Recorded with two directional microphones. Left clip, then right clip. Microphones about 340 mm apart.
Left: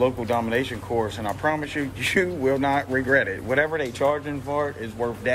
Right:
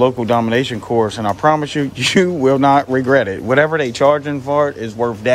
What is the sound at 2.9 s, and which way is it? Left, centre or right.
Speech, right.